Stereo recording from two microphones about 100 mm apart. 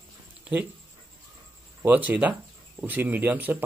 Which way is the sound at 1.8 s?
15° right (ahead or behind).